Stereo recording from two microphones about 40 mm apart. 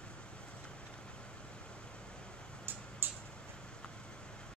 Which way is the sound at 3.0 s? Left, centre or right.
Right.